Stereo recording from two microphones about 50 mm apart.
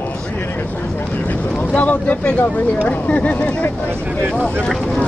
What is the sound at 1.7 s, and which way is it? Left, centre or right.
Boat, left.